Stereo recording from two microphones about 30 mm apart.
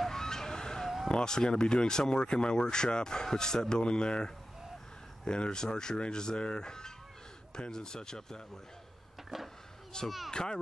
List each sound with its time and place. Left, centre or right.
0.1 s vehicle: centre
1.1 s speech: left
9.3 s a child's voice: centre
10.3 s speech: left